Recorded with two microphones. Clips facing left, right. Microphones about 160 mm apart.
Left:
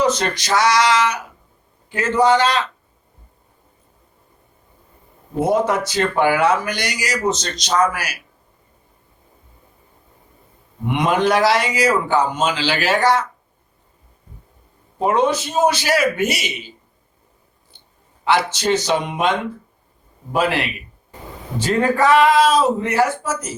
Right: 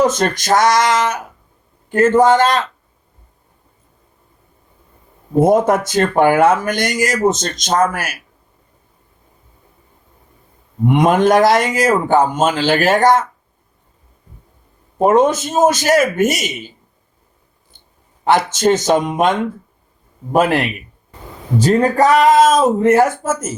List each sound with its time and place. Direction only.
0.0 s speech: 50° right (ahead or behind)
5.3 s speech: 50° right (ahead or behind)
10.8 s speech: 45° right (ahead or behind)
14.9 s speech: 45° right (ahead or behind)
18.3 s speech: 45° right (ahead or behind)